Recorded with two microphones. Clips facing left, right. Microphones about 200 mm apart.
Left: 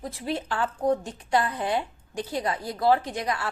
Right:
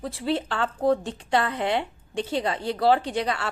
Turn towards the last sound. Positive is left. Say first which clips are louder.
# right 3 dB
turn(degrees=-30)  # may be behind; listen again after turning